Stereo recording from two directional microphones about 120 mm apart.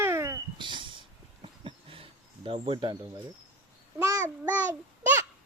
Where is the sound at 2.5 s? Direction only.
55° right (ahead or behind).